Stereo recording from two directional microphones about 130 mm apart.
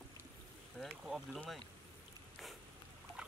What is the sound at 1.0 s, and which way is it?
Speech, 5° right (ahead or behind).